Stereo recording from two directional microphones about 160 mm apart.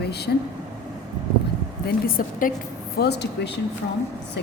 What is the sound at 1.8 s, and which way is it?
Speech, 65° left (ahead or behind).